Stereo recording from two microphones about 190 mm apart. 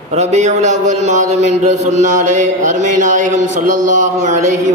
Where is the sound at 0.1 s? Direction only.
35° right (ahead or behind).